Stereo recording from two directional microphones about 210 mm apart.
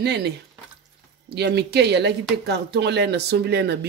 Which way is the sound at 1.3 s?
50° right (ahead or behind).